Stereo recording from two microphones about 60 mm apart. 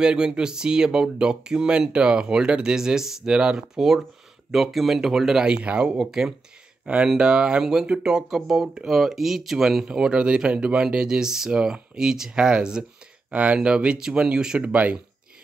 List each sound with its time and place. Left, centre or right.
0.0 s speech: centre
14.6 s speech: right